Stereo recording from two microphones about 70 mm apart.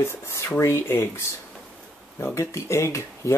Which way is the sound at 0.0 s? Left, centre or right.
Left.